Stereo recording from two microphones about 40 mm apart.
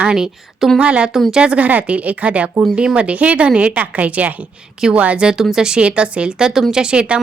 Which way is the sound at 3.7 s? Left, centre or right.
Right.